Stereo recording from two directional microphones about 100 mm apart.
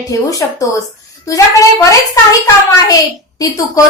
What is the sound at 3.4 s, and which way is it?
Speech, 35° left (ahead or behind).